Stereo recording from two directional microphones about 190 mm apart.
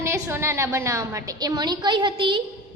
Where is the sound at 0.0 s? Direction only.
15° right (ahead or behind).